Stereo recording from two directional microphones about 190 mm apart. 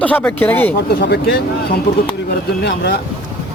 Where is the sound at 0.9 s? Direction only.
60° left (ahead or behind).